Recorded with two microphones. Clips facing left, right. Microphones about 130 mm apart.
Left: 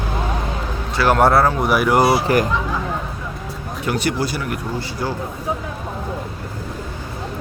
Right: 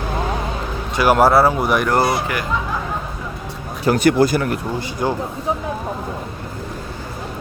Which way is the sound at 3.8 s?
45° right (ahead or behind).